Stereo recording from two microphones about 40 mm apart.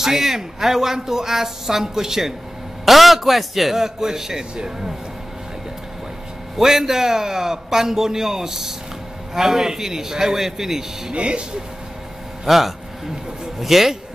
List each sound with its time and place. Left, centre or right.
0.0 s speech: centre
6.5 s speech: centre
11.1 s speech: right
12.4 s speech: centre